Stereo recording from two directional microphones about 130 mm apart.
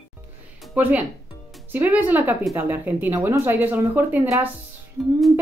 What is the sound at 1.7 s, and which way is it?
Speech, 15° right (ahead or behind).